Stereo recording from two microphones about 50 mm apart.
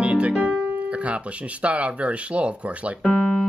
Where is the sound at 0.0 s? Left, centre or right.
Right.